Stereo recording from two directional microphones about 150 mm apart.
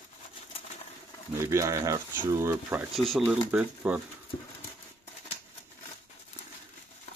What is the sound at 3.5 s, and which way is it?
Speech, 10° right (ahead or behind).